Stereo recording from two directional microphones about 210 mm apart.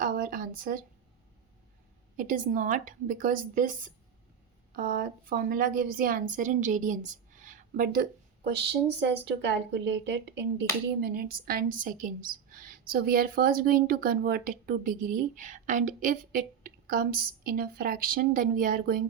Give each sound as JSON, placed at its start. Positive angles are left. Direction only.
{"t": 0.0, "sound": "a sound", "side_deg": -40}
{"t": 2.1, "sound": "a woman's voice", "side_deg": -40}
{"t": 8.4, "sound": "a woman's voice", "side_deg": -50}